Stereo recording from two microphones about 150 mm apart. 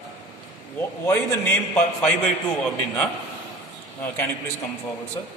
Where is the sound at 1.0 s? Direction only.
15° left (ahead or behind).